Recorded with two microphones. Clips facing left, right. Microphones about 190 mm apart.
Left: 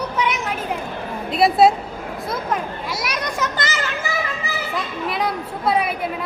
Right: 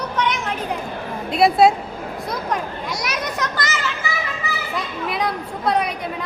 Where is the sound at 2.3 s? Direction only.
5° left (ahead or behind).